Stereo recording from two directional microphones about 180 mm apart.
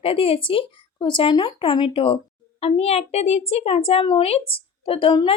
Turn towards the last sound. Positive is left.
turn(degrees=30)  # may be behind; listen again after turning